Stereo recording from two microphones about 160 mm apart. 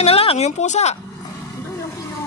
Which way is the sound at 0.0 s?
35° left (ahead or behind).